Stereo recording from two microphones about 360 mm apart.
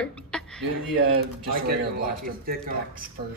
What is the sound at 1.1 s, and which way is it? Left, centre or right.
Speech, right.